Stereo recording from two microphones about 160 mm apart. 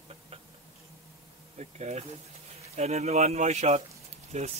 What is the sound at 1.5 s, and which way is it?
Speech, 45° right (ahead or behind).